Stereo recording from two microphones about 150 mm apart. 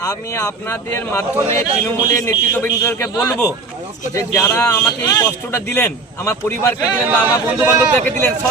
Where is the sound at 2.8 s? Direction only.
15° left (ahead or behind).